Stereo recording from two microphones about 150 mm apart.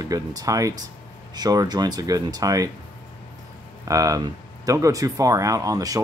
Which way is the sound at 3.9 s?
20° right (ahead or behind).